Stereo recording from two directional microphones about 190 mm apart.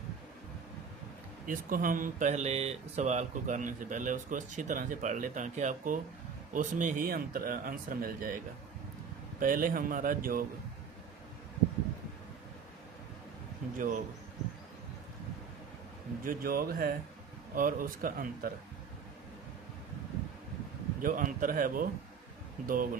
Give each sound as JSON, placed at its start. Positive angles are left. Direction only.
{"t": 1.5, "sound": "speech", "side_deg": -45}
{"t": 9.4, "sound": "speech", "side_deg": -45}
{"t": 13.7, "sound": "speech", "side_deg": -45}
{"t": 16.2, "sound": "speech", "side_deg": -50}
{"t": 21.0, "sound": "speech", "side_deg": -45}